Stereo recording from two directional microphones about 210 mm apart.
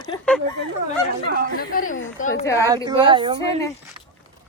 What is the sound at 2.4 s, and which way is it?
Speech, 15° left (ahead or behind).